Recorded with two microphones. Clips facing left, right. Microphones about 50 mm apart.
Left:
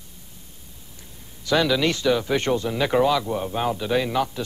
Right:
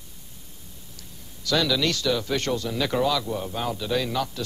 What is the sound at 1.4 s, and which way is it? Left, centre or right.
Speech, left.